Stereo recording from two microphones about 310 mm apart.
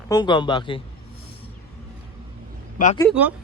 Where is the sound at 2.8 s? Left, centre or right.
Left.